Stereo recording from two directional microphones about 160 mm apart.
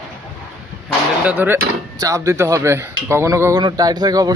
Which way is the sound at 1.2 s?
10° right (ahead or behind).